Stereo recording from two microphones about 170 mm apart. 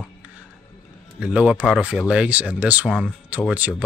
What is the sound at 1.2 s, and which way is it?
Speech, 5° right (ahead or behind).